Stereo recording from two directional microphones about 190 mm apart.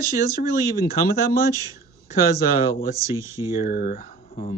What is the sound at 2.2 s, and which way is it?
Speech, 50° left (ahead or behind).